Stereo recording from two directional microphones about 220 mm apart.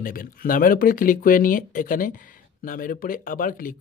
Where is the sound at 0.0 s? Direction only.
40° left (ahead or behind).